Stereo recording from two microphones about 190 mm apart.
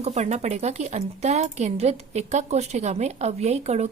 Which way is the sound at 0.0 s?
35° right (ahead or behind).